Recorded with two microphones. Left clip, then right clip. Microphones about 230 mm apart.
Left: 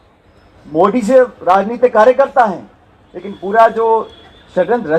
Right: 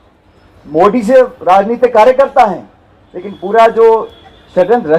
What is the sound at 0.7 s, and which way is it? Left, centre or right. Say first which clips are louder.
A man's voice: right 3 dB; right.